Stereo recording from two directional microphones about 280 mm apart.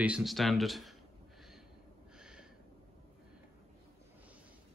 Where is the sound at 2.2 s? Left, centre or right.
Centre.